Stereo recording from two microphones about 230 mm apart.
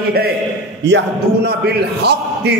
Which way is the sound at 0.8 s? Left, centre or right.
Right.